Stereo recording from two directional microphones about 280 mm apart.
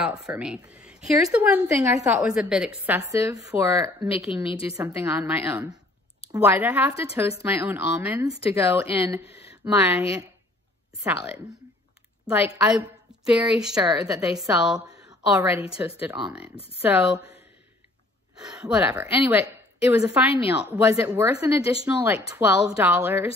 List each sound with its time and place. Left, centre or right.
0.0 s a woman's voice: centre
4.5 s a woman's voice: centre
4.7 s a woman's voice: centre
11.1 s a woman's voice: centre
14.9 s a sound: centre
16.0 s a woman's voice: centre